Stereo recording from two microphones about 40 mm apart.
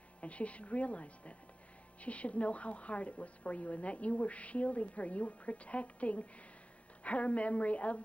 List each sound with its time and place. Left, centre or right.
0.2 s a woman's voice: left